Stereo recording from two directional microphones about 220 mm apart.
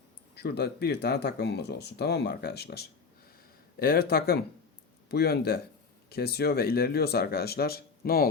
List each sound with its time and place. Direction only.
0.3 s speech: 45° left (ahead or behind)